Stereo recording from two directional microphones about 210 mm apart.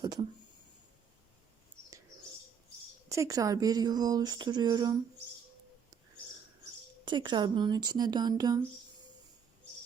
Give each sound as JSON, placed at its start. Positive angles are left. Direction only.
{"t": 0.0, "sound": "a sound", "side_deg": -20}
{"t": 3.1, "sound": "speech", "side_deg": -15}
{"t": 7.0, "sound": "speech", "side_deg": -20}